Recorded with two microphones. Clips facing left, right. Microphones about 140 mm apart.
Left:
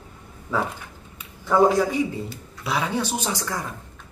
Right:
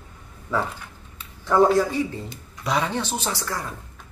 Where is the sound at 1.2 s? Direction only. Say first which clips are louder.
Even; 15° left (ahead or behind).